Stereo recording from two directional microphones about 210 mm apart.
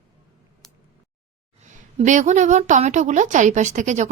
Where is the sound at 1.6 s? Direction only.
35° right (ahead or behind).